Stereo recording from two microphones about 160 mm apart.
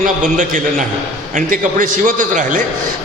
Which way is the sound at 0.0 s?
50° right (ahead or behind).